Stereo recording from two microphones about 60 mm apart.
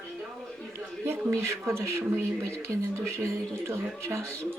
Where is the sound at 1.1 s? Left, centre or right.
Right.